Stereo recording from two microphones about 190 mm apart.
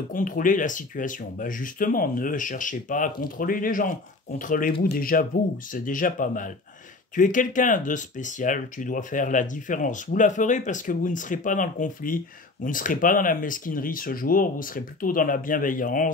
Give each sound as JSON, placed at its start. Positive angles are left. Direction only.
{"t": 0.1, "sound": "speech", "side_deg": 45}